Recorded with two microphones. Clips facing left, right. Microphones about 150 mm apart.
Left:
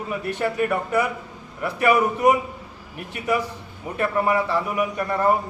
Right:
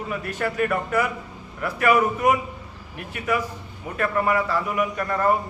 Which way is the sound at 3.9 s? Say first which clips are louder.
Left 1 dB; 15° left (ahead or behind).